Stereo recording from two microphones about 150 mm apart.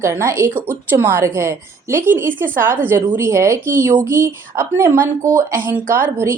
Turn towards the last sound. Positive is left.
turn(degrees=-15)  # may be behind; listen again after turning